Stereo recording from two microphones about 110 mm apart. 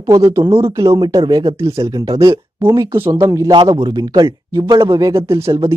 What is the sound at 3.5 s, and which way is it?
Speech, 45° right (ahead or behind).